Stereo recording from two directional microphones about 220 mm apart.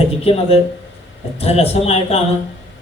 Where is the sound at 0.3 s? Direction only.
25° left (ahead or behind).